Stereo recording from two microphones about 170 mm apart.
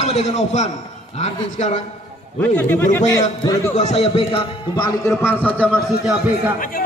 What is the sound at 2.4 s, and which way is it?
Speech, 10° left (ahead or behind).